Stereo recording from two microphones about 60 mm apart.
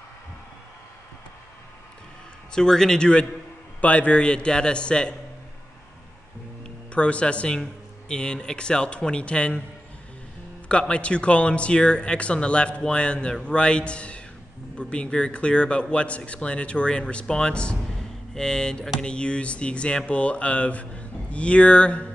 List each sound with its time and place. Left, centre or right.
2.5 s speech: centre
6.9 s speech: centre
10.7 s speech: centre
17.8 s a sound: centre
18.9 s speech: centre